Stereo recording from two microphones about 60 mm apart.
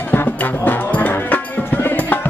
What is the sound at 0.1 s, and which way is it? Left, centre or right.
Music, left.